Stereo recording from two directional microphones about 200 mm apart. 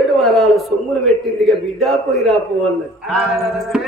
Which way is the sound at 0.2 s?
Centre (ahead or behind).